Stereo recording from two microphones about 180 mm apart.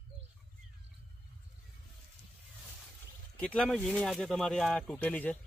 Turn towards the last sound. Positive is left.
turn(degrees=10)  # may be behind; listen again after turning